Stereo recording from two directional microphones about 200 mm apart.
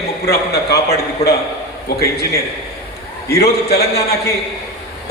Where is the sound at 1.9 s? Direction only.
50° left (ahead or behind).